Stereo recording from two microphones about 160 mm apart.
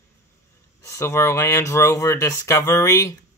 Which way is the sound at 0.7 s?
15° left (ahead or behind).